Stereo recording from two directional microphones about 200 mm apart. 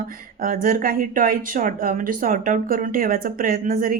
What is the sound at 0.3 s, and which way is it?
A woman's voice, 45° right (ahead or behind).